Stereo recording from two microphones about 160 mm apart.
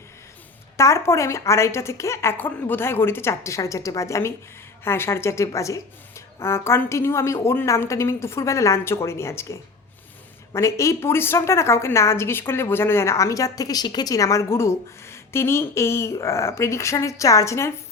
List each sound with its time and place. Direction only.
0.8 s a woman's voice: 20° left (ahead or behind)